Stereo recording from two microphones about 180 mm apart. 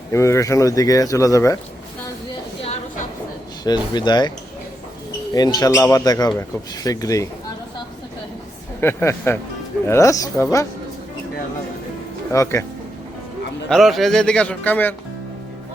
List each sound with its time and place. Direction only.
0.1 s speech: 15° left (ahead or behind)
3.6 s speech: 25° left (ahead or behind)
5.3 s speech: 20° left (ahead or behind)
8.8 s speech: 15° left (ahead or behind)
12.3 s speech: 15° left (ahead or behind)
13.7 s a man's voice: centre (ahead or behind)